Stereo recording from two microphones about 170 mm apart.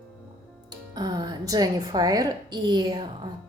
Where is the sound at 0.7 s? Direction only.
25° right (ahead or behind).